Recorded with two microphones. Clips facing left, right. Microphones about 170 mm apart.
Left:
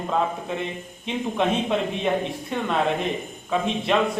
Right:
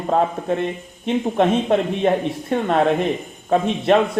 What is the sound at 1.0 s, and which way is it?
Speech, 55° right (ahead or behind).